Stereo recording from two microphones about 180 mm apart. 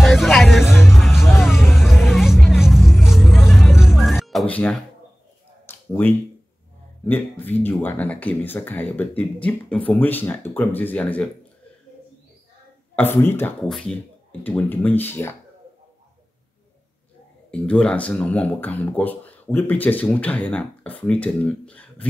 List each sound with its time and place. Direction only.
0.0 s music: centre (ahead or behind)
5.7 s a sound: 10° left (ahead or behind)
7.1 s speech: 10° left (ahead or behind)
13.0 s speech: 10° left (ahead or behind)
17.5 s speech: 5° left (ahead or behind)